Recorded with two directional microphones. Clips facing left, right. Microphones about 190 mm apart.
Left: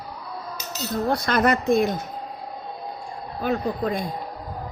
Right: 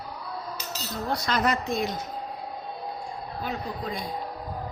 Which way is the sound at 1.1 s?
55° left (ahead or behind).